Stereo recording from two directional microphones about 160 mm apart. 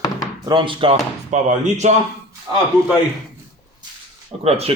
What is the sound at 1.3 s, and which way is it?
Speech, 50° right (ahead or behind).